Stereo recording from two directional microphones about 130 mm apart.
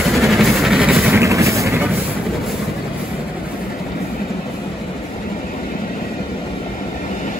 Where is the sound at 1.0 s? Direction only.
20° right (ahead or behind).